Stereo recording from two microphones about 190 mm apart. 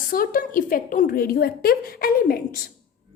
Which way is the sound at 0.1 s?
45° left (ahead or behind).